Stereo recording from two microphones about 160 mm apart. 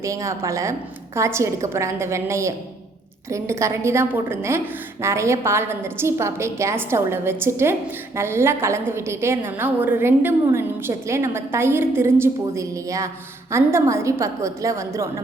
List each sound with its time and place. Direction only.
0.0 s a woman's voice: 20° right (ahead or behind)